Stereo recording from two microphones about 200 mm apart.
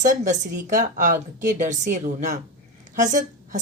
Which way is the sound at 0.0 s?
40° right (ahead or behind).